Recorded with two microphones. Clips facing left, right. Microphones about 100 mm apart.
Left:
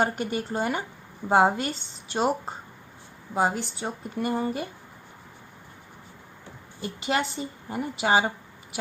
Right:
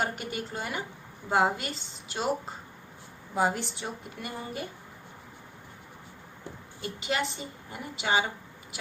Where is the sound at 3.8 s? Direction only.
35° left (ahead or behind).